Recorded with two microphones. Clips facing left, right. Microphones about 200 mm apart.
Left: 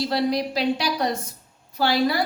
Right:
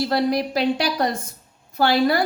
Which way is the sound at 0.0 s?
50° right (ahead or behind).